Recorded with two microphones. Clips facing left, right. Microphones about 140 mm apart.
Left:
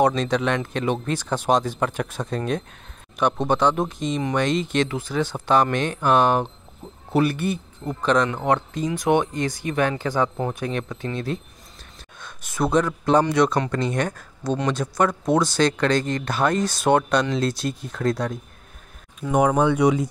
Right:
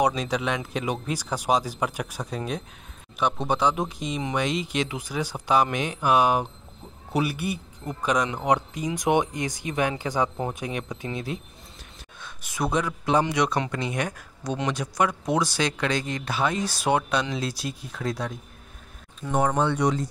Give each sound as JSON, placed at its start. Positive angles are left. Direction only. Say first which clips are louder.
{"t": 0.0, "sound": "speech", "louder": "left 4 dB", "side_deg": -10}
{"t": 12.2, "sound": "a sound", "louder": "left 4 dB", "side_deg": -5}
{"t": 12.7, "sound": "speech", "louder": "left 5 dB", "side_deg": -10}
{"t": 19.1, "sound": "speech", "louder": "left 4 dB", "side_deg": 10}